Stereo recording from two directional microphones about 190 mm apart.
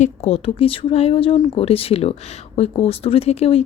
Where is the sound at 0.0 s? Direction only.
30° left (ahead or behind).